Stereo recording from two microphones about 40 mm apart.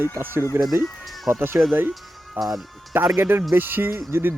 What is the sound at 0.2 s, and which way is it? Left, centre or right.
Speech, right.